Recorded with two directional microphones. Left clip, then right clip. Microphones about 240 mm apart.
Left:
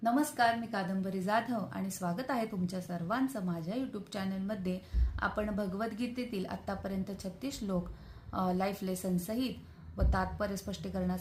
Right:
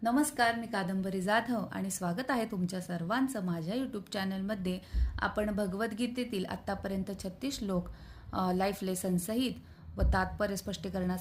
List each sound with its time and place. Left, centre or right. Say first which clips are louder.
0.0 s a woman's voice: even; right